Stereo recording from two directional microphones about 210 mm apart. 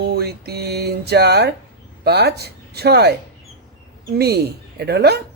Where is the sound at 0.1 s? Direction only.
50° right (ahead or behind).